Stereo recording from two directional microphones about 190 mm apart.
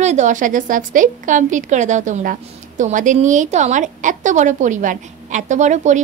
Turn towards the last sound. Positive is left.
turn(degrees=-40)  # may be behind; listen again after turning